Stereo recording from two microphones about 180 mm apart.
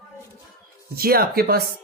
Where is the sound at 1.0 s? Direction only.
55° right (ahead or behind).